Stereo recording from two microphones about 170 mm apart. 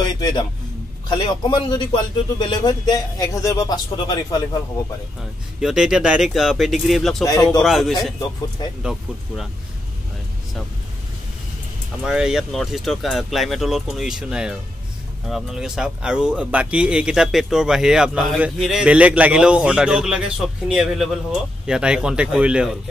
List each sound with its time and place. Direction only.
0.0 s a man's voice: 25° left (ahead or behind)
5.6 s speech: 5° right (ahead or behind)
12.0 s speech: 5° right (ahead or behind)